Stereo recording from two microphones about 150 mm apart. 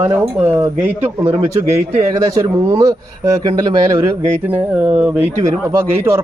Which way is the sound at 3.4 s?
25° right (ahead or behind).